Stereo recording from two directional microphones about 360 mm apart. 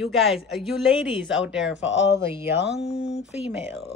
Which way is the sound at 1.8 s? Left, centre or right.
Left.